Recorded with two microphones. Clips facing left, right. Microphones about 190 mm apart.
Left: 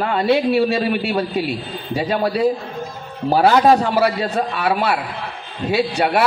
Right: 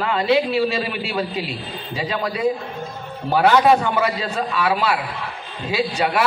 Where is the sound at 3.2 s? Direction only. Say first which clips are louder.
Left 2 dB; 35° left (ahead or behind).